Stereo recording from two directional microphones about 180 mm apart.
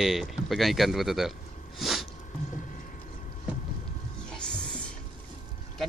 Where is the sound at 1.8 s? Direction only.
Centre (ahead or behind).